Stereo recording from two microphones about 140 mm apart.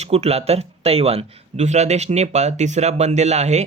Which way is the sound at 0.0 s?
50° right (ahead or behind).